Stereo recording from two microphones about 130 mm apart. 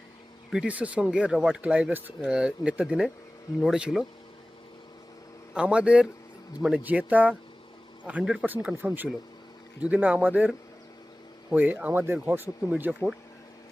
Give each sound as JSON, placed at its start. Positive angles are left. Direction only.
{"t": 0.5, "sound": "speech", "side_deg": -10}
{"t": 5.5, "sound": "speech", "side_deg": -10}
{"t": 11.5, "sound": "speech", "side_deg": -10}